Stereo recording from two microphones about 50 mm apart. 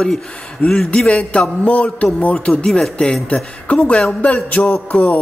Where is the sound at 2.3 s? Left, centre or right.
Centre.